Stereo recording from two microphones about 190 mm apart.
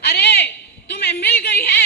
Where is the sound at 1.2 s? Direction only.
60° left (ahead or behind).